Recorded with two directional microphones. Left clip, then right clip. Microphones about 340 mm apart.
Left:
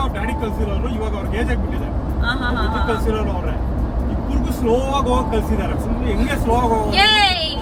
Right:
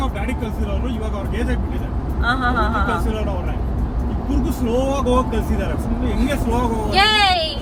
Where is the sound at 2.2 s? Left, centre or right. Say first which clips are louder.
Right 3 dB; centre.